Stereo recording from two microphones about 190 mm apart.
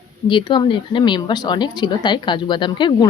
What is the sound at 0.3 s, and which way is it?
Speech, 25° left (ahead or behind).